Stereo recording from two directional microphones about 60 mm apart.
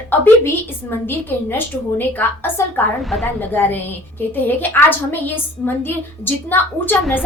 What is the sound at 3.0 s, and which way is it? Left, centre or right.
Speech, centre.